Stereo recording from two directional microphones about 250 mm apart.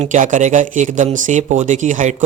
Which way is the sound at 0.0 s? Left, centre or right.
Right.